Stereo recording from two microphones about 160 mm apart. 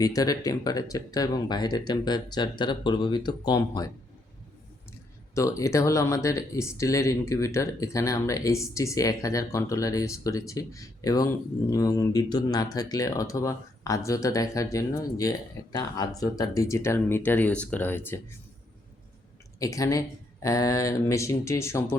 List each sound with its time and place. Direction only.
0.0 s speech: 25° left (ahead or behind)
5.3 s speech: 20° left (ahead or behind)
19.5 s speech: 20° left (ahead or behind)